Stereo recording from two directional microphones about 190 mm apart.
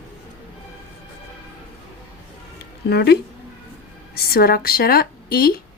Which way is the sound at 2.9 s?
60° left (ahead or behind).